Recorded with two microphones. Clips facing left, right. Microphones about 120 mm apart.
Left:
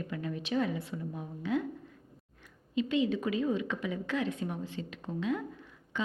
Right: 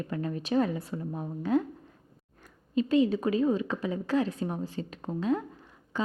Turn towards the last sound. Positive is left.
turn(degrees=-35)  # may be behind; listen again after turning